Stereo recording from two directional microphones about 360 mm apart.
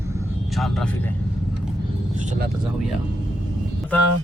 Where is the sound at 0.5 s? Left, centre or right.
Centre.